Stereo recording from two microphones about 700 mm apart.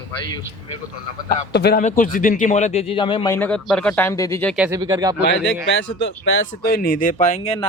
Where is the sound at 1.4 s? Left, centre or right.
Centre.